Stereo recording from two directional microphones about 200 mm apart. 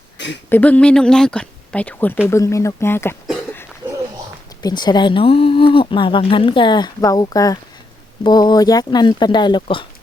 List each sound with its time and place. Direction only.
0.2 s a sound: 60° left (ahead or behind)
0.5 s speech: 5° left (ahead or behind)
4.6 s speech: 20° left (ahead or behind)